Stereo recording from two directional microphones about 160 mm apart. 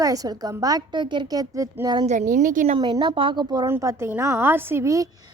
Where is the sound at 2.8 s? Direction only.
30° right (ahead or behind).